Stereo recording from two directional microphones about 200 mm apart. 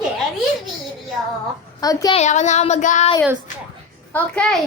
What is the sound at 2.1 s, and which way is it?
Child singing, 35° left (ahead or behind).